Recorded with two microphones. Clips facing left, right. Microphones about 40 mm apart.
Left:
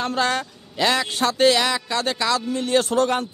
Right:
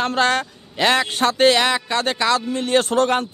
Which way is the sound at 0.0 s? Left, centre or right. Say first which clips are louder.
Right 4 dB; right.